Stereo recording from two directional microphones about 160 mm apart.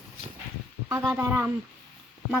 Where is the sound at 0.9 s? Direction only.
15° right (ahead or behind).